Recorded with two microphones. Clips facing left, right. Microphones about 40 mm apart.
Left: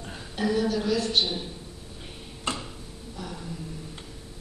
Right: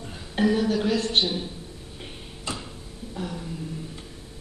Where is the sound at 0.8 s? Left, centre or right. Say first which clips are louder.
Right 2 dB; right.